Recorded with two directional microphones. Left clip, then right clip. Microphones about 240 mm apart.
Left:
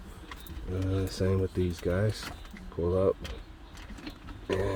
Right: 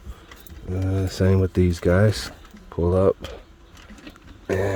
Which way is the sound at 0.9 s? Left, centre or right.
Right.